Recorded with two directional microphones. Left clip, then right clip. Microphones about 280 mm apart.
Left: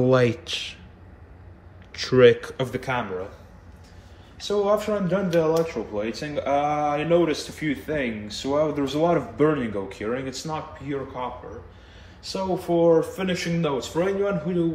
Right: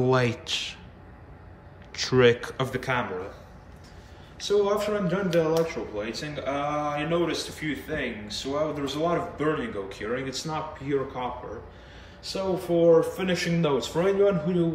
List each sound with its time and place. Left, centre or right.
0.0 s a man's voice: centre
1.9 s a man's voice: centre
4.4 s a man's voice: centre